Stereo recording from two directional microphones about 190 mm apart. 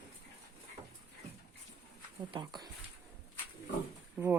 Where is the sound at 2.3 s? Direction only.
20° right (ahead or behind).